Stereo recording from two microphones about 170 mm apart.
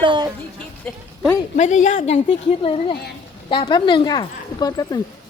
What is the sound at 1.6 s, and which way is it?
Speech, 45° left (ahead or behind).